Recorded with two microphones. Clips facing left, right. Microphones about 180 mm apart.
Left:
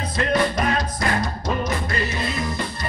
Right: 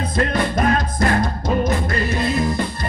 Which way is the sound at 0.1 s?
50° right (ahead or behind).